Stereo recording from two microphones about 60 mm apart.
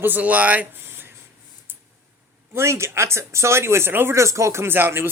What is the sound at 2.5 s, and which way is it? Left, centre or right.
Speech, right.